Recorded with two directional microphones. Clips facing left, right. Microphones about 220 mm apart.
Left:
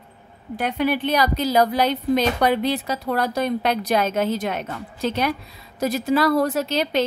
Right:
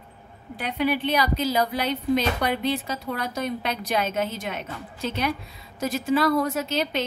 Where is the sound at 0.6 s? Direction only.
45° left (ahead or behind).